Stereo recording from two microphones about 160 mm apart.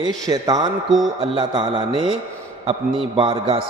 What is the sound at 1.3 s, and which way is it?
Speech, 35° right (ahead or behind).